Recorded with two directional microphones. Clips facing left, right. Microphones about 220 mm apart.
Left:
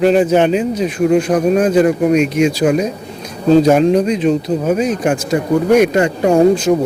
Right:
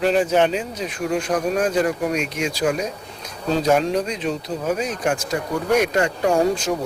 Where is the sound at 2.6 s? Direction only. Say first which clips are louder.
Left 8 dB; 20° left (ahead or behind).